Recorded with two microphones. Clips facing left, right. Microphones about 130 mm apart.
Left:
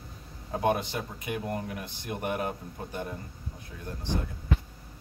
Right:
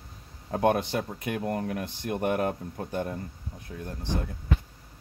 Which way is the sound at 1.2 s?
55° right (ahead or behind).